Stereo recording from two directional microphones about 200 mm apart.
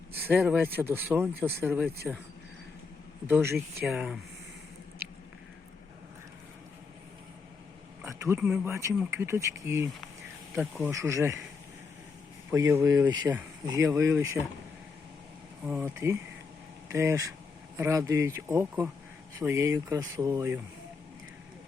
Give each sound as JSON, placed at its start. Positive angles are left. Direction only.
{"t": 0.3, "sound": "speech", "side_deg": -5}
{"t": 3.2, "sound": "speech", "side_deg": -10}
{"t": 8.4, "sound": "speech", "side_deg": -5}
{"t": 12.5, "sound": "speech", "side_deg": -15}
{"t": 15.6, "sound": "speech", "side_deg": -10}